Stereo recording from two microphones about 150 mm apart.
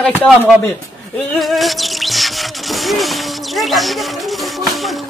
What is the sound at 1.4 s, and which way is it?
Music, centre (ahead or behind).